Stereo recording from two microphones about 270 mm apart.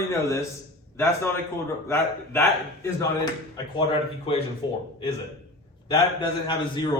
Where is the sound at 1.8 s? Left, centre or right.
Centre.